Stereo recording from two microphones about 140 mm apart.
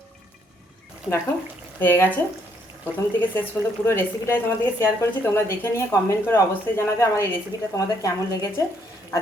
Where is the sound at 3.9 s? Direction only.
15° left (ahead or behind).